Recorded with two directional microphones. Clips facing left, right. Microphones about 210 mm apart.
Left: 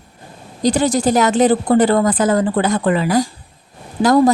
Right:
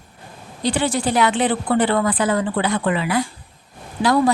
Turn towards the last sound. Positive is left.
turn(degrees=45)  # may be behind; listen again after turning